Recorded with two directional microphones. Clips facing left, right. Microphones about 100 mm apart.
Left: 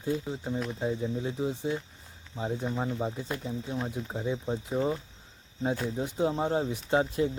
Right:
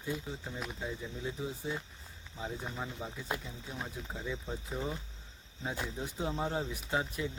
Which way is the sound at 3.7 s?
20° left (ahead or behind).